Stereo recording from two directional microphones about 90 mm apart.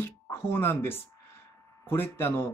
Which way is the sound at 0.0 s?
25° left (ahead or behind).